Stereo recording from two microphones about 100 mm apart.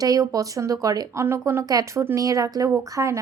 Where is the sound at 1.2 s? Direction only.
30° right (ahead or behind).